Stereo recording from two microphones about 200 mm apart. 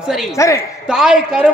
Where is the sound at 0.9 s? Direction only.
5° right (ahead or behind).